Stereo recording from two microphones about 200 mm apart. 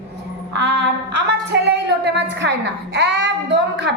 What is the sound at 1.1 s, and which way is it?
A woman's voice, 60° right (ahead or behind).